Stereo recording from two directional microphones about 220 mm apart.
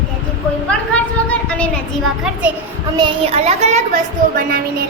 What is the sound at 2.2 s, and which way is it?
Speech, 5° right (ahead or behind).